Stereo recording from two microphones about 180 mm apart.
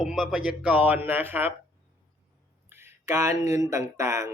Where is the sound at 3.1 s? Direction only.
15° right (ahead or behind).